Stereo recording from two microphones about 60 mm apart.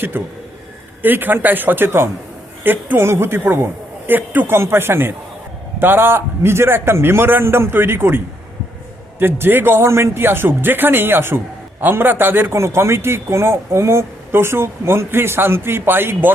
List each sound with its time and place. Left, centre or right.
0.1 s a man's voice: right
12.5 s a woman's voice: right